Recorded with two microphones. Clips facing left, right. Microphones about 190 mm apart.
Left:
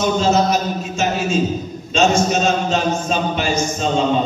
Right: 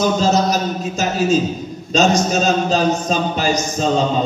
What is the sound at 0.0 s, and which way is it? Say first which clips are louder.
A man's voice: even; 35° right (ahead or behind).